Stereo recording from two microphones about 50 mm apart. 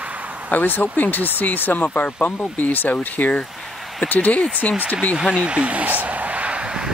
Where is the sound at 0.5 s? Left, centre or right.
Left.